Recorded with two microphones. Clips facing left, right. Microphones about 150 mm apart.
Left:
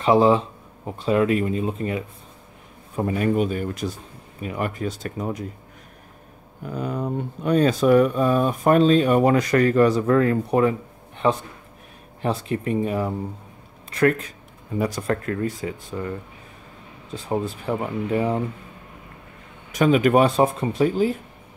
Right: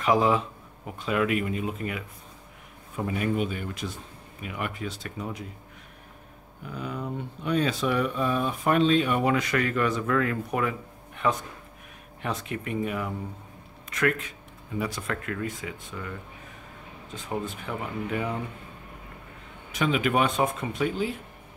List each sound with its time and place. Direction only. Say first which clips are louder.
0.0 s speech: left 6 dB; 30° left (ahead or behind)
3.0 s speech: left 6 dB; 40° left (ahead or behind)
6.6 s speech: left 7 dB; 45° left (ahead or behind)
19.7 s speech: left 8 dB; 45° left (ahead or behind)